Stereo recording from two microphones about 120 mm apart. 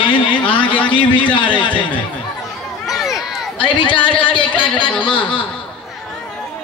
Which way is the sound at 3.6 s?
45° left (ahead or behind).